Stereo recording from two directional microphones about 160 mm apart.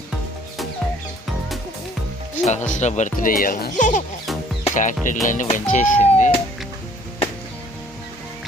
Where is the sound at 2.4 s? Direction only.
50° left (ahead or behind).